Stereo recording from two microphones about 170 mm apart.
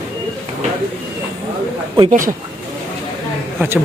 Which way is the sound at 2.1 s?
55° right (ahead or behind).